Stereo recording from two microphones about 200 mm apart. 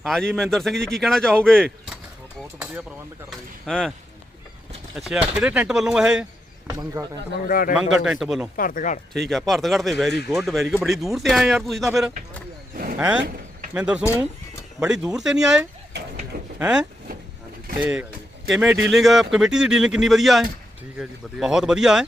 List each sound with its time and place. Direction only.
0.0 s a man's voice: centre (ahead or behind)
3.2 s a man's voice: centre (ahead or behind)
4.9 s a man's voice: 5° right (ahead or behind)
6.7 s speech: 20° right (ahead or behind)
7.4 s speech: 45° left (ahead or behind)
8.0 s a man's voice: centre (ahead or behind)
8.5 s speech: 45° left (ahead or behind)
9.1 s a man's voice: centre (ahead or behind)
12.7 s a sound: 45° right (ahead or behind)
13.0 s a man's voice: 5° right (ahead or behind)